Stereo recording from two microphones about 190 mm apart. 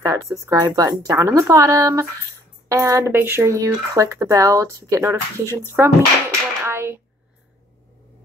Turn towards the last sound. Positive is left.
turn(degrees=-10)  # may be behind; listen again after turning